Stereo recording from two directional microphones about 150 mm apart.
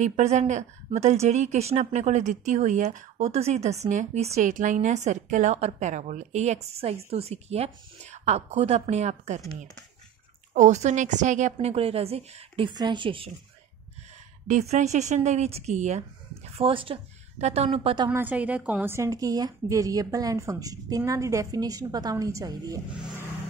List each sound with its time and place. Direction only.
0.0 s speech: 50° right (ahead or behind)
10.5 s speech: 50° right (ahead or behind); by 13.3 s 35° right (ahead or behind)
14.5 s speech: 50° right (ahead or behind)
16.5 s a woman's voice: 35° right (ahead or behind)
18.1 s a woman's voice: 10° right (ahead or behind)